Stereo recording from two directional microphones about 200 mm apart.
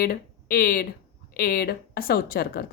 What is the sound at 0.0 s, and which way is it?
Speech, 50° left (ahead or behind).